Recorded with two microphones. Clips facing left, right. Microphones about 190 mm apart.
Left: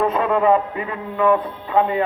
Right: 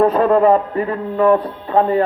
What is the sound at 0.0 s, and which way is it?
A man's voice, 40° right (ahead or behind).